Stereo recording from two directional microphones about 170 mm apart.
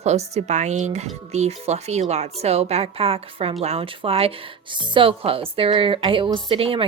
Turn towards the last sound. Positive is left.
turn(degrees=-35)  # may be behind; listen again after turning